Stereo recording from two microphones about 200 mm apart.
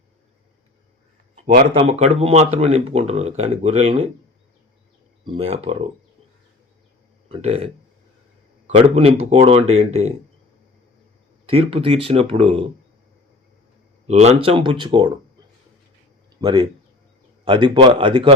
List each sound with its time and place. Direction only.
1.7 s speech: 30° right (ahead or behind)
5.2 s speech: 30° right (ahead or behind)
7.3 s speech: 30° right (ahead or behind)
11.4 s speech: 30° right (ahead or behind)
14.1 s speech: 35° right (ahead or behind)
16.4 s speech: 20° right (ahead or behind)